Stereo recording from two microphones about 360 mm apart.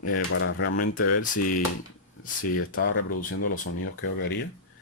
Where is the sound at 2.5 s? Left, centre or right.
Left.